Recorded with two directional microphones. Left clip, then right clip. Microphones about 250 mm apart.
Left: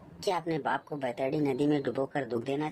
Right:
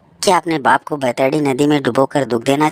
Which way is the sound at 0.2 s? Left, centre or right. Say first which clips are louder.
Right 17 dB; right.